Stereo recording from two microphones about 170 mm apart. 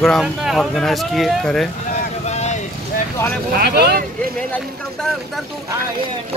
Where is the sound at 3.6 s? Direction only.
70° right (ahead or behind).